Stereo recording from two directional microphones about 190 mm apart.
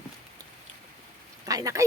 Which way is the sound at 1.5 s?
20° right (ahead or behind).